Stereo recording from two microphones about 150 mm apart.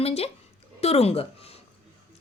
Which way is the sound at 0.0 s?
40° left (ahead or behind).